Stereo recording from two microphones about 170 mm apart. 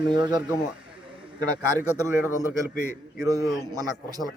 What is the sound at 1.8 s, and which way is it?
A man's voice, 15° right (ahead or behind).